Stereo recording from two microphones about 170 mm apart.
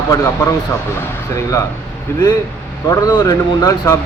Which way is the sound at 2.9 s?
20° left (ahead or behind).